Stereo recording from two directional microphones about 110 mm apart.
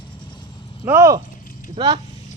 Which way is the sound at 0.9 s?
25° right (ahead or behind).